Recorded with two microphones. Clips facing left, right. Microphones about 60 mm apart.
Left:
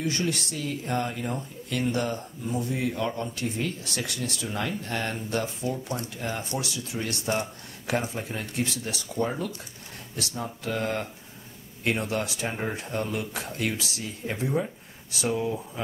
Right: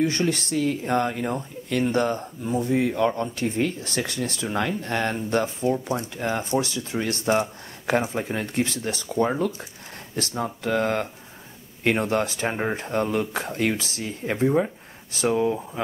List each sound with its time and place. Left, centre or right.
0.0 s speech: right